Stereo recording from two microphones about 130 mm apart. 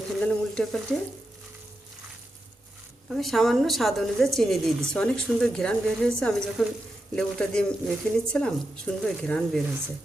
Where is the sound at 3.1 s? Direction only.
Centre (ahead or behind).